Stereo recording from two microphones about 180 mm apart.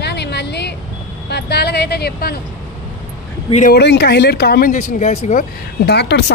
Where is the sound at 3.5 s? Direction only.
45° left (ahead or behind).